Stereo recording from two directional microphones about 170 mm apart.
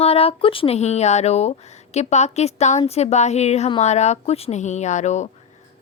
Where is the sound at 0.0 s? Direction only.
35° left (ahead or behind).